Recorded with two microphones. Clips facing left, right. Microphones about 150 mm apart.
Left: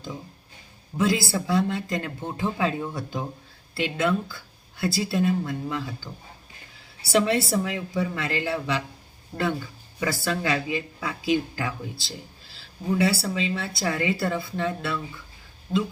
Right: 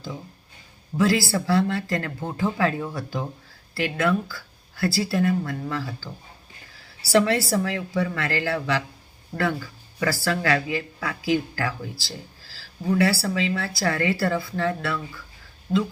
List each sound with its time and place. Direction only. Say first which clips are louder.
0.9 s speech: right 2 dB; 20° left (ahead or behind)
15.7 s speech: right 2 dB; centre (ahead or behind)